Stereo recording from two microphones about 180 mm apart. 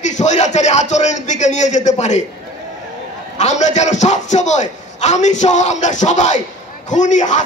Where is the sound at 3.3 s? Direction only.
40° left (ahead or behind).